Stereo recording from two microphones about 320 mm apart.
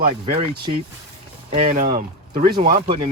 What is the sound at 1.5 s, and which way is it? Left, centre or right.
Speech, right.